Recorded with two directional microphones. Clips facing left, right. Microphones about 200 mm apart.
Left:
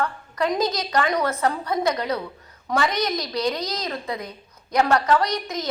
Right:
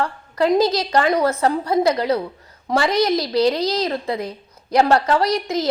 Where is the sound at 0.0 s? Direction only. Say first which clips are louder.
Right 5 dB; 30° right (ahead or behind).